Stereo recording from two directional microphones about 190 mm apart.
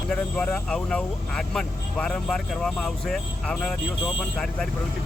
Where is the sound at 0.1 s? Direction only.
5° left (ahead or behind).